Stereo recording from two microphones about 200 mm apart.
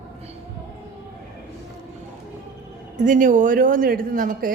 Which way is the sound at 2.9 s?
40° right (ahead or behind).